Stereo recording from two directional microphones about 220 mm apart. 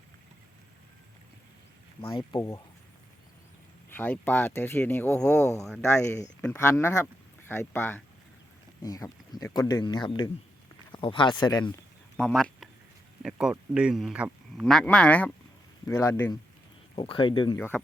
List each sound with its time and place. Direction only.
2.0 s speech: 20° left (ahead or behind)
3.8 s speech: 10° left (ahead or behind)
5.4 s speech: 10° right (ahead or behind)
5.8 s speech: 10° left (ahead or behind)
12.1 s a sound: 5° left (ahead or behind)
13.2 s speech: 5° right (ahead or behind)
16.9 s speech: 25° left (ahead or behind)
17.6 s speech: 10° left (ahead or behind)